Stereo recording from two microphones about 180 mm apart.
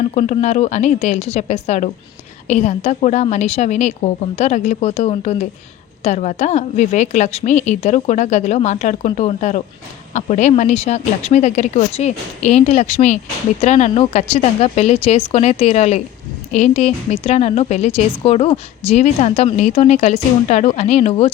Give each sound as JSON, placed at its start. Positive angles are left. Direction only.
{"t": 0.1, "sound": "a woman's voice", "side_deg": 40}